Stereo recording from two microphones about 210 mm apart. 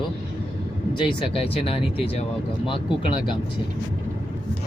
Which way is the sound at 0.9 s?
25° left (ahead or behind).